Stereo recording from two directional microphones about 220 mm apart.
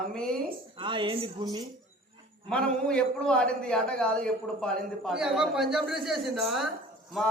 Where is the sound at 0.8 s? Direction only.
20° right (ahead or behind).